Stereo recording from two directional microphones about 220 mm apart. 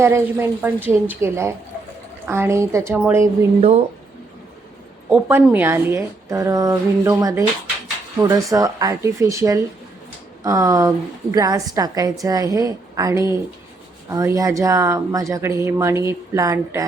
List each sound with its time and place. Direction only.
0.0 s speech: 10° right (ahead or behind)
3.6 s speech: 25° right (ahead or behind)
5.0 s a woman's voice: 5° right (ahead or behind)